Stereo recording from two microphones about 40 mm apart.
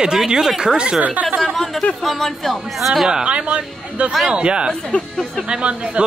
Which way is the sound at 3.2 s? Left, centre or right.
Right.